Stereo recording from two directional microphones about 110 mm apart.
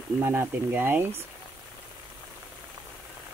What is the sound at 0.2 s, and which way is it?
Speech, 20° right (ahead or behind).